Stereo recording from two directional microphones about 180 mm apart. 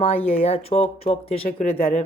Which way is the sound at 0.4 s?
35° left (ahead or behind).